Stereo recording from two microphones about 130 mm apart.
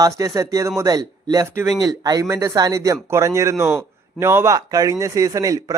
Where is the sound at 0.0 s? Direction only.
25° right (ahead or behind).